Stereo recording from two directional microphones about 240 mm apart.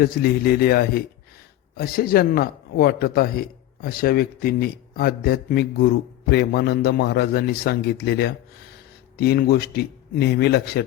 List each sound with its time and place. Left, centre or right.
0.0 s speech: left